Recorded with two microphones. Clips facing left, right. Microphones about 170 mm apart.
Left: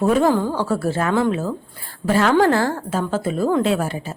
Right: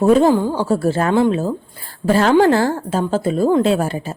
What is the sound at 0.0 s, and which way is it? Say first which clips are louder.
A woman's voice: right 4 dB; 25° right (ahead or behind).